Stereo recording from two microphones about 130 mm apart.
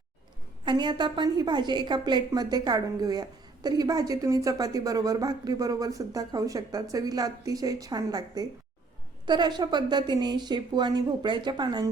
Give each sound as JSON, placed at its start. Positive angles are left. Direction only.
{"t": 0.6, "sound": "a woman's voice", "side_deg": -35}